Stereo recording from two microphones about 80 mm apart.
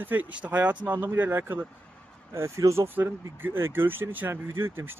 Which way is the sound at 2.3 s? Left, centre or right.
Right.